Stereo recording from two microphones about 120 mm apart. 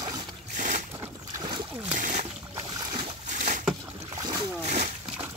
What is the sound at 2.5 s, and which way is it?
Boat, 30° right (ahead or behind).